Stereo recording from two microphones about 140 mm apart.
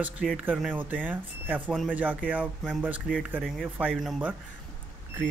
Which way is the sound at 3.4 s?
Centre (ahead or behind).